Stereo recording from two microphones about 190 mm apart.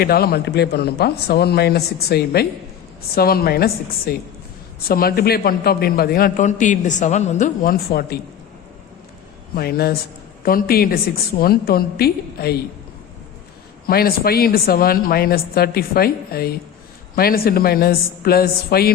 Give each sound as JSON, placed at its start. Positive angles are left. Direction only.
{"t": 0.0, "sound": "a man's voice", "side_deg": 55}
{"t": 9.6, "sound": "a man's voice", "side_deg": 55}
{"t": 13.8, "sound": "a man's voice", "side_deg": 50}